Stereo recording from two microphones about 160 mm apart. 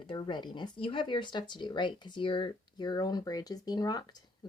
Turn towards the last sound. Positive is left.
turn(degrees=25)  # may be behind; listen again after turning